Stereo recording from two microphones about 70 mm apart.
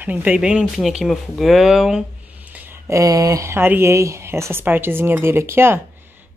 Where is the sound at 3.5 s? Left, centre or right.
Right.